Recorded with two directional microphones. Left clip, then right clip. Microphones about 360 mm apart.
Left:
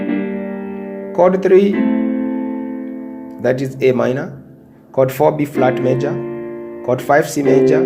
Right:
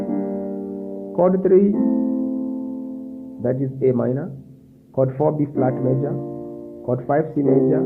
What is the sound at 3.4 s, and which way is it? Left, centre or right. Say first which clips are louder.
Speech: left 6 dB; centre.